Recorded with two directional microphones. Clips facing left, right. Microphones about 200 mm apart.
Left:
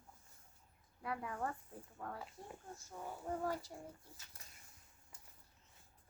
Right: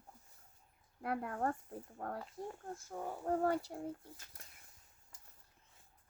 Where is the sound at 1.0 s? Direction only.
55° right (ahead or behind).